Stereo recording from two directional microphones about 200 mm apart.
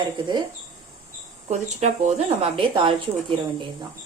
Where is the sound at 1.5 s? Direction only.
35° right (ahead or behind).